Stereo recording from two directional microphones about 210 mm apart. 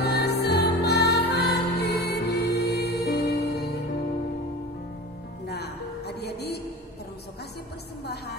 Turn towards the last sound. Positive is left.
turn(degrees=50)  # may be behind; listen again after turning